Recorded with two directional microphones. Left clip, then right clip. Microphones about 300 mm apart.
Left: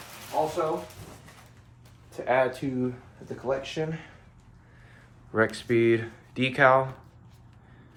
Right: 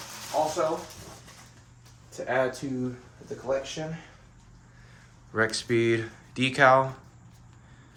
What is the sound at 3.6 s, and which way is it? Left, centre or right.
Speech, left.